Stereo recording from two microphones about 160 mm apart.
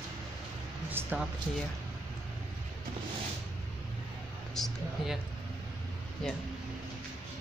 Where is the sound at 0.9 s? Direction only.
15° right (ahead or behind).